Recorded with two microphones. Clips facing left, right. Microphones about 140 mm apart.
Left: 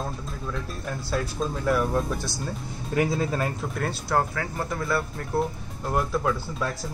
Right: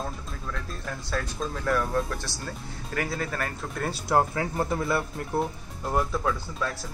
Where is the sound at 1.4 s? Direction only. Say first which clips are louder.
Left 3 dB; 15° left (ahead or behind).